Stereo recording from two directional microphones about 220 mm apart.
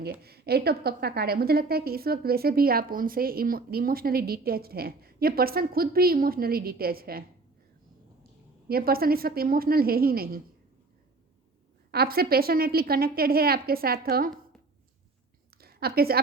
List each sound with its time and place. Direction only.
0.0 s a woman's voice: 45° right (ahead or behind)
8.6 s a woman's voice: 45° right (ahead or behind)
11.9 s a woman's voice: 45° right (ahead or behind)
15.6 s a woman's voice: 45° right (ahead or behind)